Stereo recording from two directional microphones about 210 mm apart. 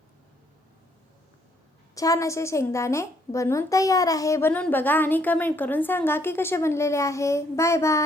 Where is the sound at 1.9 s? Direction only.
15° left (ahead or behind).